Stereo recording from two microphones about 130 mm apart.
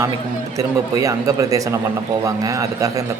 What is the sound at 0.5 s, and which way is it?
A man's voice, 25° right (ahead or behind).